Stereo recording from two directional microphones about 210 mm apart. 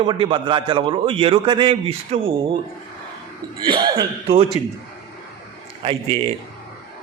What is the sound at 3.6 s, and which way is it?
A man's voice, 20° right (ahead or behind).